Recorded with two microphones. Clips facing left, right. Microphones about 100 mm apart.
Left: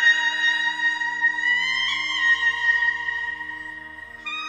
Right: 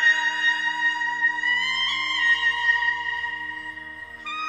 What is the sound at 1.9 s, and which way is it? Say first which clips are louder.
Music: even; 20° left (ahead or behind).